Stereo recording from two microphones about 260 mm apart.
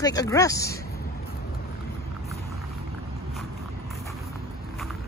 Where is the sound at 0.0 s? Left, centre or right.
Centre.